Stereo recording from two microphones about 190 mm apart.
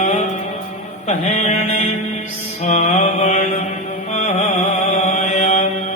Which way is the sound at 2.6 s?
35° left (ahead or behind).